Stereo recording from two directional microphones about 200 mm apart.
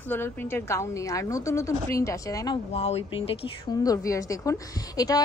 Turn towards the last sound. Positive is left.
turn(degrees=15)  # may be behind; listen again after turning